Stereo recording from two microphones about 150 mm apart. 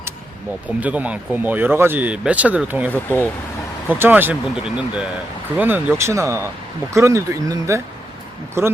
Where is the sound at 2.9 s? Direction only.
10° left (ahead or behind).